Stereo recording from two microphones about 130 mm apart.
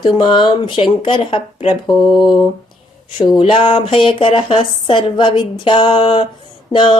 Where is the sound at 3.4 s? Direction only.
40° left (ahead or behind).